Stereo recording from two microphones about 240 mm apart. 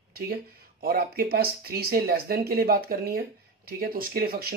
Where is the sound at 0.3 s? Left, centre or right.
Right.